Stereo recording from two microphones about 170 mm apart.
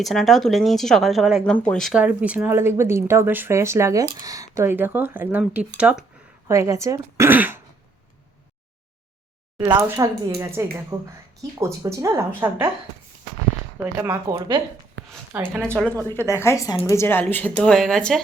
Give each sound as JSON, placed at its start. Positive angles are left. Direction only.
{"t": 0.0, "sound": "a woman's voice", "side_deg": 0}
{"t": 6.5, "sound": "speech", "side_deg": -15}
{"t": 9.6, "sound": "speech", "side_deg": -20}
{"t": 13.8, "sound": "speech", "side_deg": -15}
{"t": 14.3, "sound": "speech", "side_deg": -25}
{"t": 15.0, "sound": "a sound", "side_deg": -90}
{"t": 15.5, "sound": "speech", "side_deg": -15}
{"t": 16.0, "sound": "speech", "side_deg": 15}